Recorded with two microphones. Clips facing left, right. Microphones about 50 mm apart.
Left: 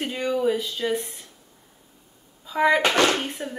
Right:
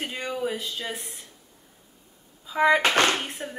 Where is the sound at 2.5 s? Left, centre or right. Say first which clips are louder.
Left 1 dB; centre.